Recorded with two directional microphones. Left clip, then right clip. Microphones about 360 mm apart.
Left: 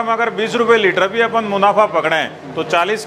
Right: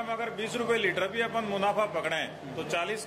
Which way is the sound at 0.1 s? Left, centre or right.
Left.